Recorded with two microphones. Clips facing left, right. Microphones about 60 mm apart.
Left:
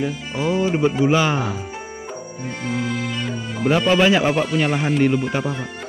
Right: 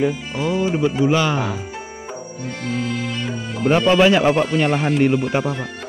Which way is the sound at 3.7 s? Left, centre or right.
Centre.